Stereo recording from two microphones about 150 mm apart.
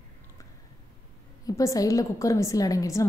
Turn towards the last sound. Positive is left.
turn(degrees=20)  # may be behind; listen again after turning